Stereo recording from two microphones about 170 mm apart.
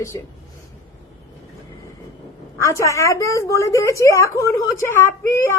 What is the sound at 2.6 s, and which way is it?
A woman's voice, 15° left (ahead or behind).